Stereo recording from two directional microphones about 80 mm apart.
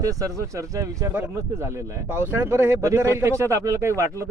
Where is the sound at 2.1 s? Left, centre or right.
Right.